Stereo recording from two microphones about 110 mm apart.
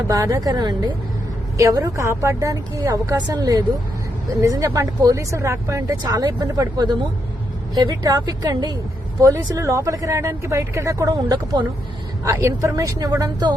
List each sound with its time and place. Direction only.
0.1 s speech: 30° right (ahead or behind)
1.5 s speech: 30° right (ahead or behind)
3.2 s speech: 40° right (ahead or behind)
6.0 s speech: 40° right (ahead or behind)
11.1 s speech: 45° right (ahead or behind)
12.2 s speech: 30° right (ahead or behind)